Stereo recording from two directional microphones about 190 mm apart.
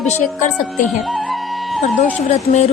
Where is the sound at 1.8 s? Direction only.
35° left (ahead or behind).